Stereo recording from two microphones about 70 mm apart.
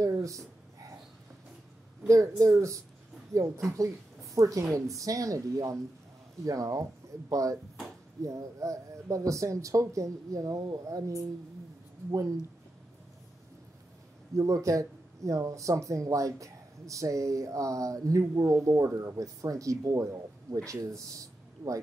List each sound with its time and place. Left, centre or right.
0.0 s speech: right
2.0 s speech: right
12.1 s speech: right
14.3 s speech: right